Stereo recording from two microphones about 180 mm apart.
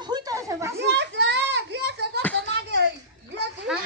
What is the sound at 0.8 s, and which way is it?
A child's voice, 75° right (ahead or behind).